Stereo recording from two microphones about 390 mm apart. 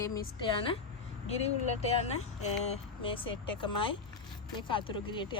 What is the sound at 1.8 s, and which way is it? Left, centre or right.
A woman's voice, centre.